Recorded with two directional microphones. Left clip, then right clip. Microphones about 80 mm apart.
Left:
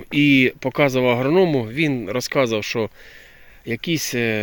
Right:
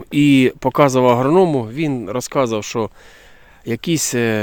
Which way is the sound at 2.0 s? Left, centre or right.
Right.